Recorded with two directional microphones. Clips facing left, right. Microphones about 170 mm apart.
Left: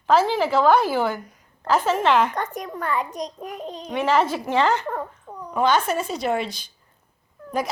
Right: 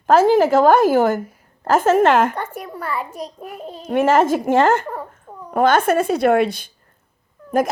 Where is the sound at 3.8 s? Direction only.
45° right (ahead or behind).